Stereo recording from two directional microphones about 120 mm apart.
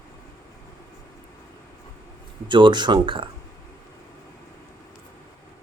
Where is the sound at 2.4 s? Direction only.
40° right (ahead or behind).